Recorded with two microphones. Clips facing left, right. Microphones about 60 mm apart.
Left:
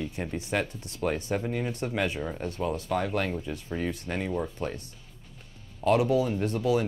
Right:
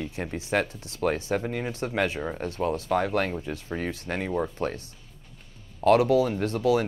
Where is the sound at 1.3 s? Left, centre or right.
Right.